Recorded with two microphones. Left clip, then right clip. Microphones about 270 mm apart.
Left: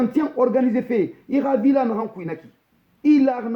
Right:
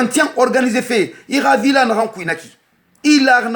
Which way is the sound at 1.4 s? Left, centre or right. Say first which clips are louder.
Right 7 dB; right.